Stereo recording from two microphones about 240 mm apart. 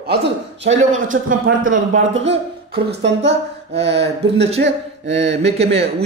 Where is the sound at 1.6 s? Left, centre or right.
Right.